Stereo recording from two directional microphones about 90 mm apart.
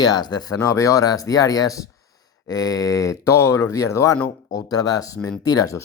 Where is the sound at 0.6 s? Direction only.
40° left (ahead or behind).